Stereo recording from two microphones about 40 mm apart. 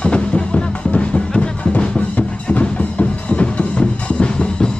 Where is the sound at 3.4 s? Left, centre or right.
Left.